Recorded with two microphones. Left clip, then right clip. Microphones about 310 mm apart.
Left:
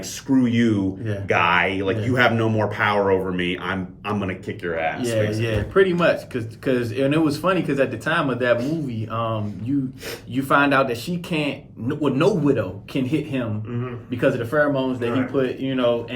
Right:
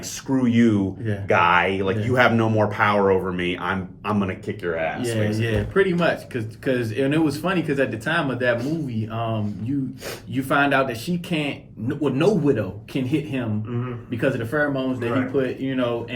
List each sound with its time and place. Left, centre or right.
0.3 s speech: centre
5.4 s speech: centre
10.3 s speech: centre
14.2 s speech: centre